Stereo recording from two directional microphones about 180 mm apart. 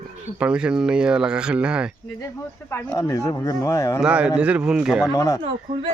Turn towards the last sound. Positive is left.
turn(degrees=-30)  # may be behind; listen again after turning